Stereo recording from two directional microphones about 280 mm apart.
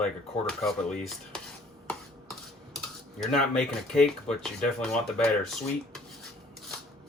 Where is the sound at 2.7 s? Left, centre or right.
Centre.